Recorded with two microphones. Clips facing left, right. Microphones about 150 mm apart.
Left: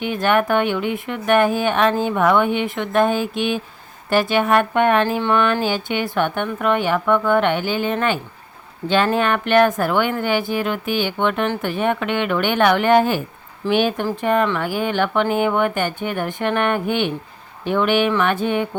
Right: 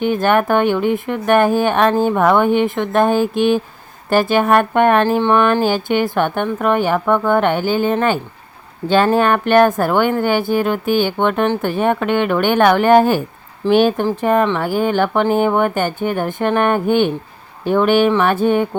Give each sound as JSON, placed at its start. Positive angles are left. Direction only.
{"t": 0.0, "sound": "a woman's voice", "side_deg": -40}